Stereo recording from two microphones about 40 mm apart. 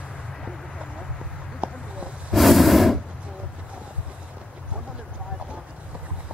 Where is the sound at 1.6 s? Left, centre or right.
Right.